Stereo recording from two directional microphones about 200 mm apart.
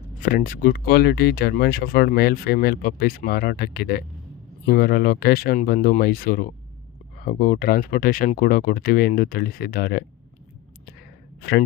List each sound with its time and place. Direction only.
0.2 s speech: 45° left (ahead or behind)